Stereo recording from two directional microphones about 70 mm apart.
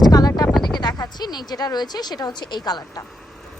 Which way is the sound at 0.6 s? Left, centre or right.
Left.